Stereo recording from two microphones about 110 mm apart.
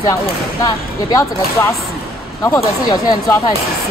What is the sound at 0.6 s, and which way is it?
Speech, 30° left (ahead or behind).